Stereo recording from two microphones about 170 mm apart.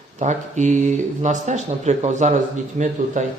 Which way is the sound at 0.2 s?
45° right (ahead or behind).